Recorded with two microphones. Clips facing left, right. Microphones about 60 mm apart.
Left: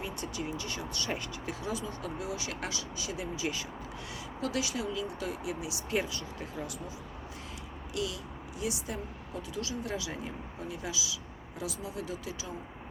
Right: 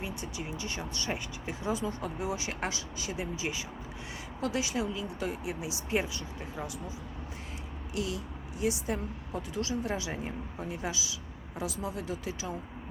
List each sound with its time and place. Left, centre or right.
0.0 s speech: right
7.9 s speech: right